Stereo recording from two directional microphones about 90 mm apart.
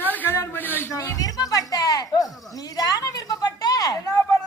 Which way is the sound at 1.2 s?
40° left (ahead or behind).